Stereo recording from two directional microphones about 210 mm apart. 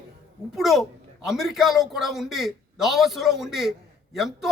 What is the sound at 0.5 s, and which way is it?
A man's voice, centre (ahead or behind).